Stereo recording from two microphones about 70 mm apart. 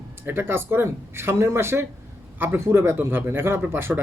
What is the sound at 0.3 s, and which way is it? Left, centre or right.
A man's voice, right.